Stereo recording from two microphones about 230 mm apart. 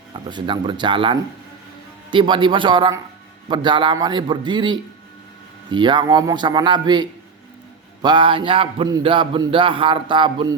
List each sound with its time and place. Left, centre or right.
0.1 s a man's voice: centre